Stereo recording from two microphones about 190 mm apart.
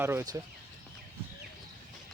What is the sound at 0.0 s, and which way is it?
Speech, 10° right (ahead or behind).